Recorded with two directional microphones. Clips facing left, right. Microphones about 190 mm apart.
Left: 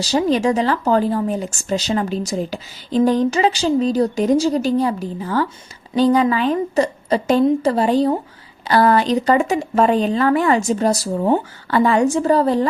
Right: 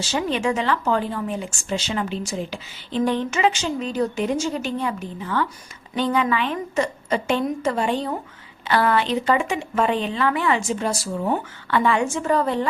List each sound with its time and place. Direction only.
0.0 s speech: 35° left (ahead or behind)